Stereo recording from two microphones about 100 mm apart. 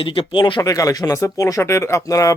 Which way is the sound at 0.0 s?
55° left (ahead or behind).